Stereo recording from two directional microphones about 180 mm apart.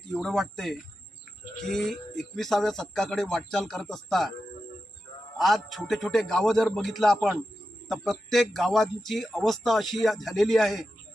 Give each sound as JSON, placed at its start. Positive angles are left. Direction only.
{"t": 0.1, "sound": "speech", "side_deg": 0}
{"t": 5.4, "sound": "speech", "side_deg": 0}